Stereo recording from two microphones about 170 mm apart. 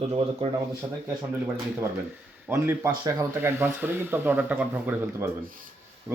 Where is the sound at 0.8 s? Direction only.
25° right (ahead or behind).